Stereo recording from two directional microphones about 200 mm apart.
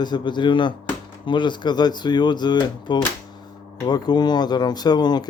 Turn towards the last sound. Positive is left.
turn(degrees=20)  # may be behind; listen again after turning